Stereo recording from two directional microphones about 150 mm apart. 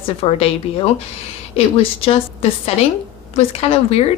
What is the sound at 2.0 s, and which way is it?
A woman's voice, 40° left (ahead or behind).